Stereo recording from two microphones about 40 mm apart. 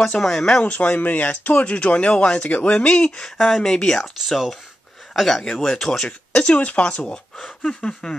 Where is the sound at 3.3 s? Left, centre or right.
Centre.